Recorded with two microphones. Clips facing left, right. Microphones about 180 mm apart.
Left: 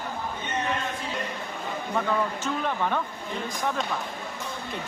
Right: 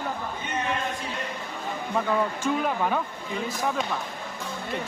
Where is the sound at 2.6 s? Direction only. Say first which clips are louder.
Right 1 dB; 10° right (ahead or behind).